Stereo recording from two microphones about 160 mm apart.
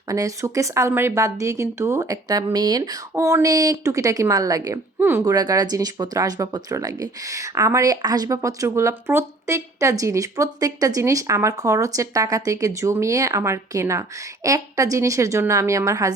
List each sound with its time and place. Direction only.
0.1 s speech: 20° right (ahead or behind)